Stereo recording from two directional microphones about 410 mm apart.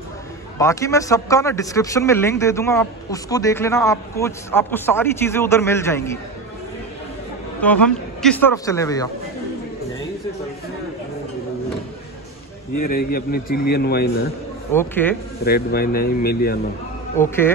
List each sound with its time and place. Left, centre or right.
0.6 s speech: centre
7.6 s a man's voice: centre
12.8 s a man's voice: left
14.7 s a man's voice: centre
15.4 s a man's voice: left